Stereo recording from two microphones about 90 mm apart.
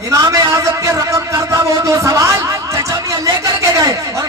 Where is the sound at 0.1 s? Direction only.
35° right (ahead or behind).